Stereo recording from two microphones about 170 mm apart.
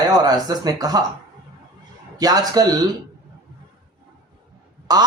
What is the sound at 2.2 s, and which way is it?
Speech, 25° right (ahead or behind).